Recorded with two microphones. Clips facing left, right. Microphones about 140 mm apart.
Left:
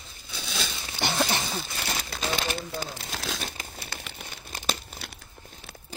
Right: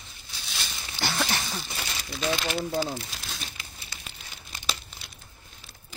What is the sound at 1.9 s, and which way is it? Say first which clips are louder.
Crumpling: right 3 dB; 50° left (ahead or behind).